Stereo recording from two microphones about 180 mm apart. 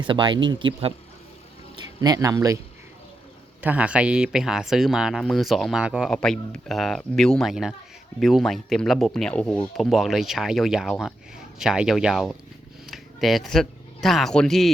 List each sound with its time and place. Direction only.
0.1 s speech: 25° right (ahead or behind)
2.0 s speech: 20° right (ahead or behind)
3.6 s speech: 10° right (ahead or behind)